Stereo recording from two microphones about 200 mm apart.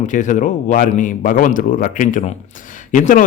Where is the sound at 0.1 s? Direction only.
40° left (ahead or behind).